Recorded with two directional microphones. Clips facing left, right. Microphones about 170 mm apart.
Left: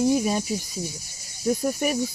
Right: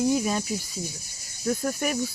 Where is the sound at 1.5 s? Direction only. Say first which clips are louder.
Left 3 dB; 20° left (ahead or behind).